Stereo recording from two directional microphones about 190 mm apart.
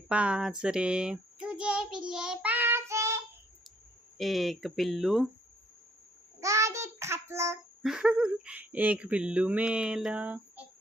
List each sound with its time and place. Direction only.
0.1 s a child's voice: 5° right (ahead or behind)
2.0 s child singing: 5° right (ahead or behind)
4.2 s speech: centre (ahead or behind)
6.4 s child singing: 15° right (ahead or behind)
7.8 s speech: 5° right (ahead or behind)